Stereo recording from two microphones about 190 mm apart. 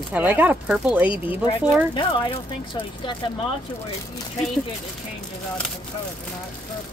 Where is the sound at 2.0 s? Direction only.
25° left (ahead or behind).